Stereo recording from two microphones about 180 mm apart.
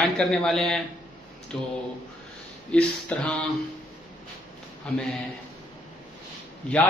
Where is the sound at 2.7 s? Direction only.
5° left (ahead or behind).